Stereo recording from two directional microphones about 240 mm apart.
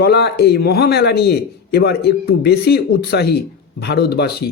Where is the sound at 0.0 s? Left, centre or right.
Left.